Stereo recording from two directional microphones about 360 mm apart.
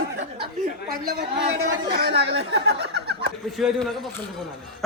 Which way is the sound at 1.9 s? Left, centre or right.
Right.